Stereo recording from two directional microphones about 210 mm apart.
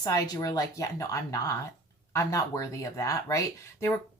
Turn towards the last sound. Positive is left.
turn(degrees=15)  # may be behind; listen again after turning